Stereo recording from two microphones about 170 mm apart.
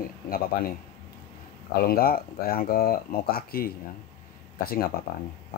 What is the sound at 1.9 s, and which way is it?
Speech, 60° left (ahead or behind).